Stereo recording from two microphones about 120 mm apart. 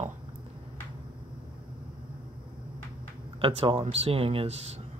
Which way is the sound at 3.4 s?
50° right (ahead or behind).